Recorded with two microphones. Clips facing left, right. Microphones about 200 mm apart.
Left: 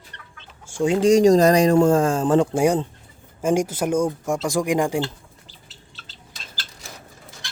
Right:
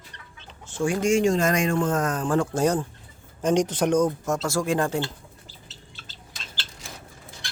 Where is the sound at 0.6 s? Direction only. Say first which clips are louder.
Left 4 dB; 10° left (ahead or behind).